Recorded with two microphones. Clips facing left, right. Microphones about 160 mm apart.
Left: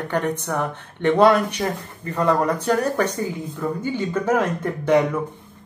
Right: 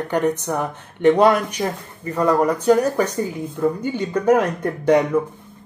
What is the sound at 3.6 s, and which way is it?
Speech, 25° right (ahead or behind).